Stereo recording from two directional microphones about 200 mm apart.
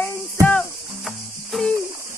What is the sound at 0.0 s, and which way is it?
Music, 5° left (ahead or behind).